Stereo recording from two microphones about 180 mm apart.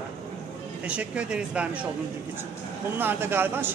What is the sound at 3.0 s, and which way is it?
Speech, 10° right (ahead or behind).